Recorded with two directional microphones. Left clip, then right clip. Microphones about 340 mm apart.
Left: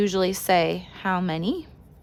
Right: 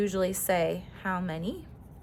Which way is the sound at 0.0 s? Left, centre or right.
Centre.